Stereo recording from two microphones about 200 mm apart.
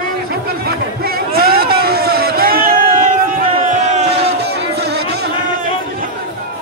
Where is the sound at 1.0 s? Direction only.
50° right (ahead or behind).